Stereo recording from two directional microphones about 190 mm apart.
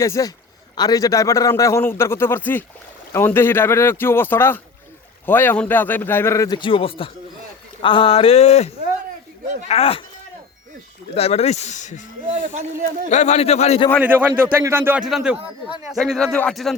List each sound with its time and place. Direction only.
0.0 s a man's voice: 15° left (ahead or behind); by 10.0 s 30° left (ahead or behind)
11.1 s speech: 30° left (ahead or behind)
12.3 s speech: 40° right (ahead or behind)
13.1 s speech: 35° left (ahead or behind)
14.0 s a man's voice: 10° right (ahead or behind)